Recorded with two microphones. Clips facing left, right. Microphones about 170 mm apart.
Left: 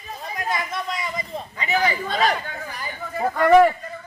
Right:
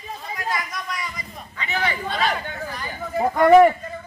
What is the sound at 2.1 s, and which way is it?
Speech, 40° left (ahead or behind).